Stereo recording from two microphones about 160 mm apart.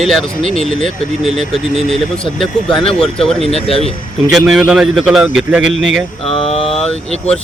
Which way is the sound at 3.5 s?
40° left (ahead or behind).